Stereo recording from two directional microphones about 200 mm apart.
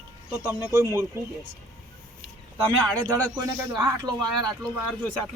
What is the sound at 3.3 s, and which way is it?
Speech, 20° right (ahead or behind).